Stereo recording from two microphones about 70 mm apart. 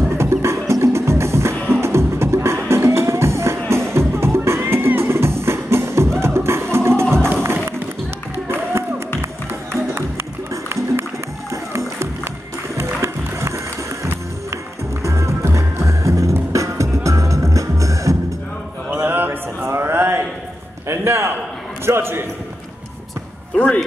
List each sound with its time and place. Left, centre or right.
0.1 s music: right
10.5 s music: right
15.0 s music: right
19.0 s a sound: right
20.9 s a sound: right
23.5 s music: centre